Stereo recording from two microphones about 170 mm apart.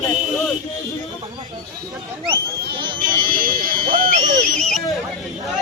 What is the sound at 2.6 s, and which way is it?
Speech, 65° right (ahead or behind).